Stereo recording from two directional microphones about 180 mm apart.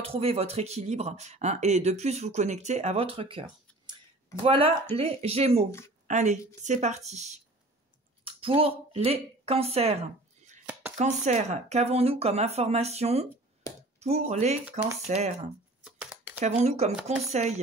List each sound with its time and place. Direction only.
0.0 s speech: 35° right (ahead or behind)
4.5 s a woman's voice: 30° right (ahead or behind)
10.6 s chopping: 10° right (ahead or behind)
11.0 s speech: 40° right (ahead or behind)
15.8 s a sound: 5° right (ahead or behind)
16.3 s speech: 35° right (ahead or behind)